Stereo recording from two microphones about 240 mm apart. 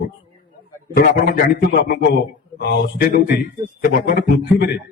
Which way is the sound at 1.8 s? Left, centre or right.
Left.